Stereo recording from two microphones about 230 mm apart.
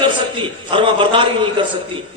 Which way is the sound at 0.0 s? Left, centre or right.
Right.